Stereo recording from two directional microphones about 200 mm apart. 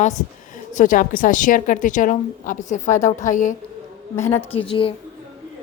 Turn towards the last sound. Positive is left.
turn(degrees=25)  # may be behind; listen again after turning